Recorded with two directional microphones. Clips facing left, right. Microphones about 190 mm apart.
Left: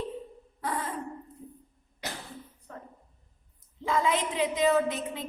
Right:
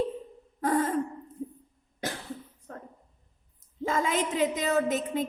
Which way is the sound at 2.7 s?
45° right (ahead or behind).